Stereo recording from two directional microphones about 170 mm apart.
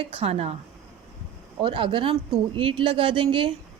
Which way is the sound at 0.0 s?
35° right (ahead or behind).